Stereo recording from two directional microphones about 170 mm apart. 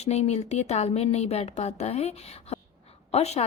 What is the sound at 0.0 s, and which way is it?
Speech, 40° left (ahead or behind).